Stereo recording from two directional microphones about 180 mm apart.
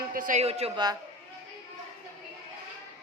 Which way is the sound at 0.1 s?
45° right (ahead or behind).